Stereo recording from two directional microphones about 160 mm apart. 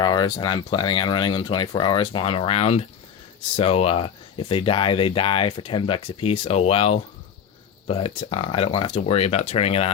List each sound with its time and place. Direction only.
0.0 s speech: 25° left (ahead or behind)